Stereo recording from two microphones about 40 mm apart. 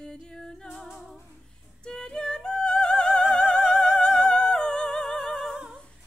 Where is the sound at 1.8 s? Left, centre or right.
Left.